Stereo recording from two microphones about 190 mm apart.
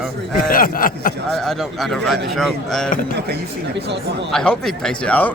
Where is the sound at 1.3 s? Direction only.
Centre (ahead or behind).